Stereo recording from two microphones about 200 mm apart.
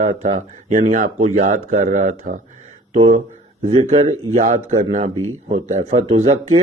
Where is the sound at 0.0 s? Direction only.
35° right (ahead or behind).